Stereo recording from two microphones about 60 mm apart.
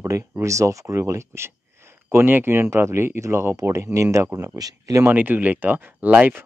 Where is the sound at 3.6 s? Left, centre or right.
Right.